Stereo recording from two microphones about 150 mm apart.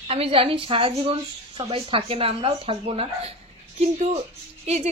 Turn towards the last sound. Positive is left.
turn(degrees=-45)  # may be behind; listen again after turning